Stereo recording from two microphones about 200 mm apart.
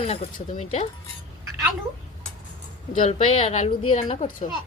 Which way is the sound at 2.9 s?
35° left (ahead or behind).